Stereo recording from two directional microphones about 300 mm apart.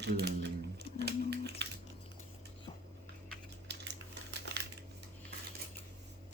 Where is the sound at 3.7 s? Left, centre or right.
Right.